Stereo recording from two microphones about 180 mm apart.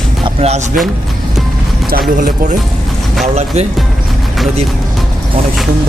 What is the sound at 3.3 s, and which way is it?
Speech, 35° right (ahead or behind).